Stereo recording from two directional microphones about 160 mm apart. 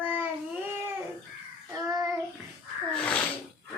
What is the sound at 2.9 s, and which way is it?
Sneeze, 5° left (ahead or behind).